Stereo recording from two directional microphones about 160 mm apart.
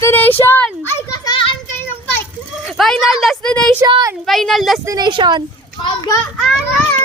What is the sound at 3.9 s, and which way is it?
Speech, 25° right (ahead or behind).